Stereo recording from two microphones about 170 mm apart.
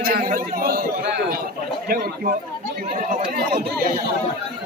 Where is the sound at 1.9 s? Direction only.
60° right (ahead or behind).